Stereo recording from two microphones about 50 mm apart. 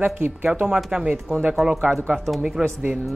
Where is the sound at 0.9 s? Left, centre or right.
Right.